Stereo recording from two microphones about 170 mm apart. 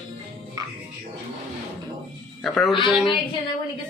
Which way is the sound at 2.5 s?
Centre (ahead or behind).